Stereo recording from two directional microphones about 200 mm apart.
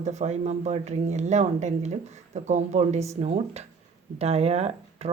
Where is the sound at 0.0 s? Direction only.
35° right (ahead or behind).